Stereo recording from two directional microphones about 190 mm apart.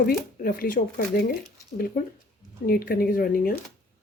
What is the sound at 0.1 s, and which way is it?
A woman's voice, 50° left (ahead or behind).